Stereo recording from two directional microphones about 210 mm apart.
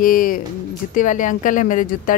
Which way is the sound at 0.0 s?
40° left (ahead or behind).